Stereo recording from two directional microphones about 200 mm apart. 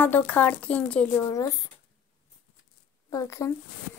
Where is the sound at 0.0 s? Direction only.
10° left (ahead or behind).